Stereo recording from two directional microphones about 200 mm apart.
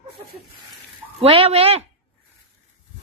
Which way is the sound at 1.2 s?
30° right (ahead or behind).